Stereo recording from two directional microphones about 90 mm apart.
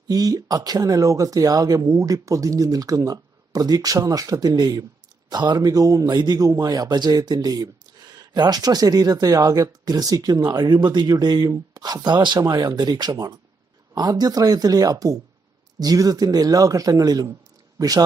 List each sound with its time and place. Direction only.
0.1 s speech: 45° right (ahead or behind)